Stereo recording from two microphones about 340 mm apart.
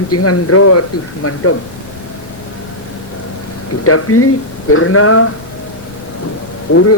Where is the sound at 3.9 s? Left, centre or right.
Left.